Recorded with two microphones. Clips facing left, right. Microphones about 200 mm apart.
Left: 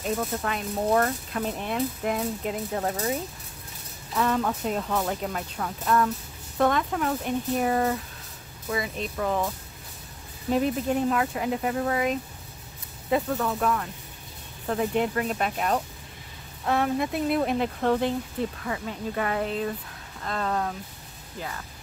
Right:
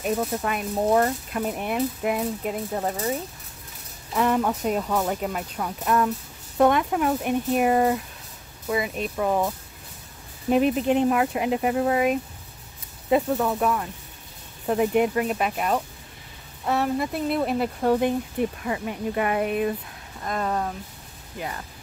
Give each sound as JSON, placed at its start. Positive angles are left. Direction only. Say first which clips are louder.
{"t": 0.0, "sound": "speech", "louder": "right 3 dB", "side_deg": -10}
{"t": 4.2, "sound": "speech", "louder": "right 3 dB", "side_deg": -15}
{"t": 10.5, "sound": "speech", "louder": "right 4 dB", "side_deg": -20}